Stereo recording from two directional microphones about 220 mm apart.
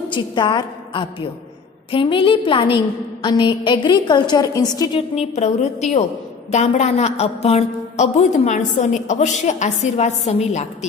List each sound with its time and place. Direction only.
0.1 s a woman's voice: 20° left (ahead or behind)
5.1 s a woman's voice: 30° left (ahead or behind)